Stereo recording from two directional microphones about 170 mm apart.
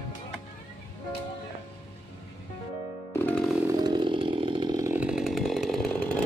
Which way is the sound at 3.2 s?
5° left (ahead or behind).